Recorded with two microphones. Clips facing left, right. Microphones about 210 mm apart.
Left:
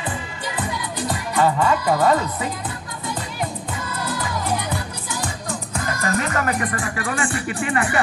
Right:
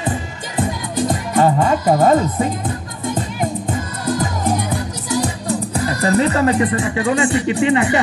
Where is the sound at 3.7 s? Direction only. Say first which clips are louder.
Right 6 dB; 45° right (ahead or behind).